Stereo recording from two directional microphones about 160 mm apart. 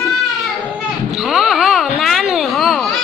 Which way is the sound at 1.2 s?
Centre (ahead or behind).